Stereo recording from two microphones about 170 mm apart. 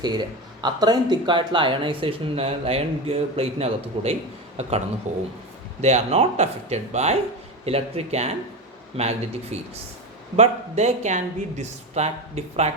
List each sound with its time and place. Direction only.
0.0 s speech: 25° right (ahead or behind)